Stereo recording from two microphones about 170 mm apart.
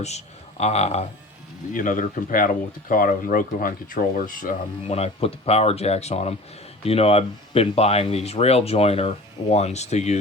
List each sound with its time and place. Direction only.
0.6 s speech: 40° left (ahead or behind)
1.7 s speech: 50° left (ahead or behind)
4.9 s speech: 35° left (ahead or behind)